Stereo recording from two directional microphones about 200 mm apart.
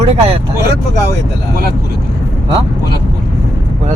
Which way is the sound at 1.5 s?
50° right (ahead or behind).